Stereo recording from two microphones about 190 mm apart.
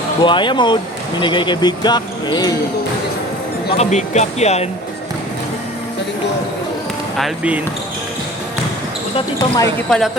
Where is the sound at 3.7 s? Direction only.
35° left (ahead or behind).